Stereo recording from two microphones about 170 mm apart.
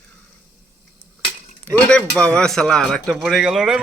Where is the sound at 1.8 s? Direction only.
5° left (ahead or behind).